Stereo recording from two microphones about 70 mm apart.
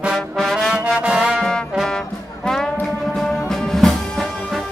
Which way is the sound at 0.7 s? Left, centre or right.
Centre.